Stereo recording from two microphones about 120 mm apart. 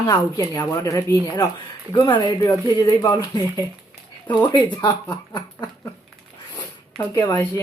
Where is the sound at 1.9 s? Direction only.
40° left (ahead or behind).